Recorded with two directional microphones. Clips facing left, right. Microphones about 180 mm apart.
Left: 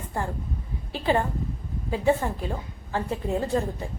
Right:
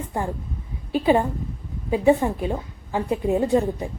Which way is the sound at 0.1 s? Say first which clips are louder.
Right 2 dB; 15° right (ahead or behind).